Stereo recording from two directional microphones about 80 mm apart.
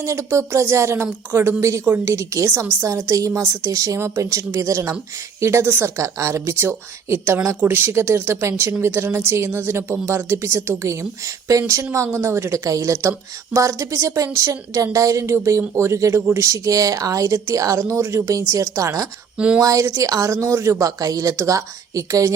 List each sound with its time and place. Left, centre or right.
0.0 s speech: right
6.0 s speech: right